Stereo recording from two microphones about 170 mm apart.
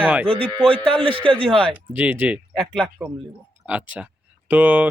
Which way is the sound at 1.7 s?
10° right (ahead or behind).